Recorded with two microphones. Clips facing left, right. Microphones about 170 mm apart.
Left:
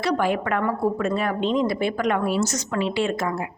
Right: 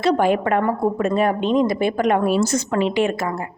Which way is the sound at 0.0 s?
20° right (ahead or behind).